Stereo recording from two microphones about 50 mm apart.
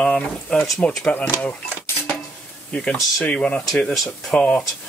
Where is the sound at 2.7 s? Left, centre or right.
Left.